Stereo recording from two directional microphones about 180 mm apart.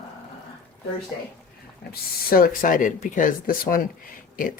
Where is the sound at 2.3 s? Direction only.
55° left (ahead or behind).